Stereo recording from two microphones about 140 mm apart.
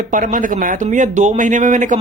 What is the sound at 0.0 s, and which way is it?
Speech, 70° right (ahead or behind).